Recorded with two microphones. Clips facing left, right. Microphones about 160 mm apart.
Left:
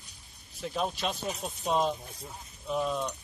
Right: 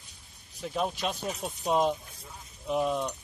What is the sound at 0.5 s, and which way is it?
Speech, 5° right (ahead or behind).